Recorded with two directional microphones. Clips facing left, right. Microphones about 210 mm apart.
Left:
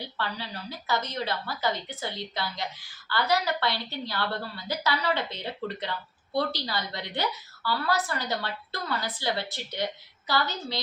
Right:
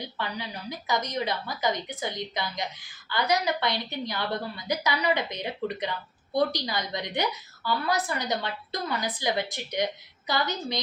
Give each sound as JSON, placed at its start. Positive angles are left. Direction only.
{"t": 0.0, "sound": "a woman's voice", "side_deg": -15}